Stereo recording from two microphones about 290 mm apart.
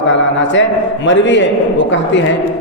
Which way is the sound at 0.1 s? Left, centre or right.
Left.